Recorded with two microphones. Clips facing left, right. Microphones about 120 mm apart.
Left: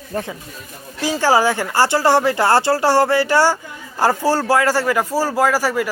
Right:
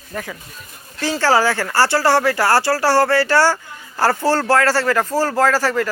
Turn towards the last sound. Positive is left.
turn(degrees=10)  # may be behind; listen again after turning